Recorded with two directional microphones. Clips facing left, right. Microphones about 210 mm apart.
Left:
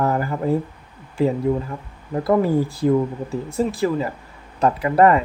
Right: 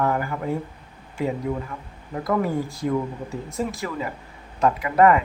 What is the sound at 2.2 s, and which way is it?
Speech, 30° left (ahead or behind).